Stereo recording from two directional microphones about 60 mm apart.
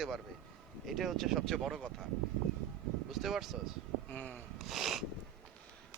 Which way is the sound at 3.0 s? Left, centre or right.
Centre.